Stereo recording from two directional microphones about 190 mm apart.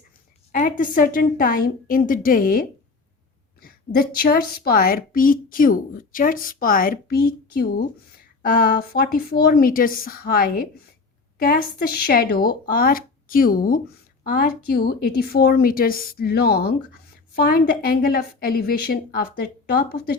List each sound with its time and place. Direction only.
0.5 s a woman's voice: 45° left (ahead or behind)